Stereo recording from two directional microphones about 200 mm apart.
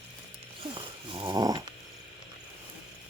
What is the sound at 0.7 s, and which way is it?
Dog, 25° right (ahead or behind).